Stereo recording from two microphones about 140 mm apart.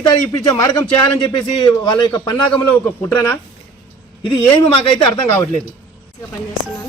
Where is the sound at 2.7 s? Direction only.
15° left (ahead or behind).